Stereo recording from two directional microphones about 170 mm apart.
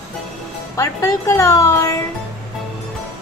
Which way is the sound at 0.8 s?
20° left (ahead or behind).